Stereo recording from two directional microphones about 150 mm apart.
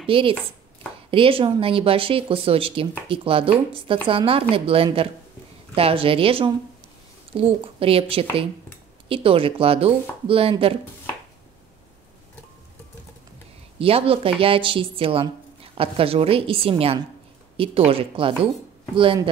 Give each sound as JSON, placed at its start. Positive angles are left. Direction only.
{"t": 0.0, "sound": "speech", "side_deg": -35}
{"t": 13.7, "sound": "speech", "side_deg": -40}